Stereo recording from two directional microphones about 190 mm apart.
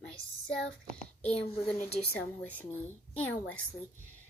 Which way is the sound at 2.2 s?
10° left (ahead or behind).